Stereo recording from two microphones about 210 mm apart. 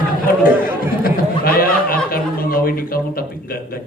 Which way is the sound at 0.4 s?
45° left (ahead or behind).